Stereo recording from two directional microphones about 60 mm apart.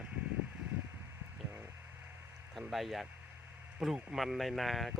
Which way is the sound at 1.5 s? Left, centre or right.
Right.